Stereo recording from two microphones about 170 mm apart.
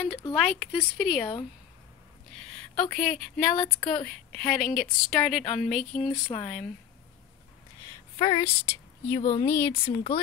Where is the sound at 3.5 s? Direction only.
30° left (ahead or behind).